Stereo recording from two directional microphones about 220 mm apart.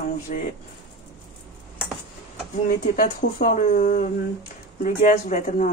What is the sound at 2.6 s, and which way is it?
Speech, 40° left (ahead or behind).